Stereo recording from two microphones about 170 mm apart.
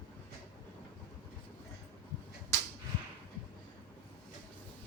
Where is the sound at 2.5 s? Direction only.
15° left (ahead or behind).